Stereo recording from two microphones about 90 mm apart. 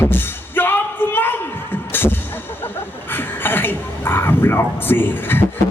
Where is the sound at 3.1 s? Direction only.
25° left (ahead or behind).